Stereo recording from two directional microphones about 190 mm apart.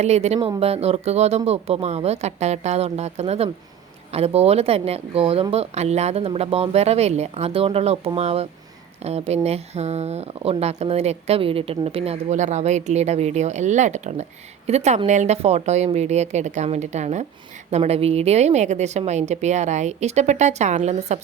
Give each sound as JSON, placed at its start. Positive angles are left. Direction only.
{"t": 0.0, "sound": "speech", "side_deg": -35}